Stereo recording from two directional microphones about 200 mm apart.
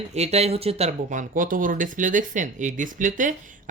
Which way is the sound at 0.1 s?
30° right (ahead or behind).